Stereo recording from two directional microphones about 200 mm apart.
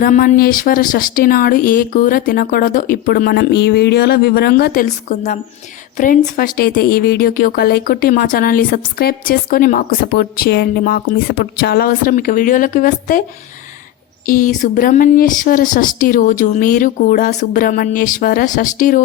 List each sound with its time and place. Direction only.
0.0 s a woman's voice: 40° left (ahead or behind)
14.3 s speech: 40° left (ahead or behind)